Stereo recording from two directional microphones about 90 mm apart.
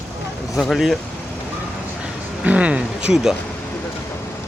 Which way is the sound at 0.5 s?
Centre (ahead or behind).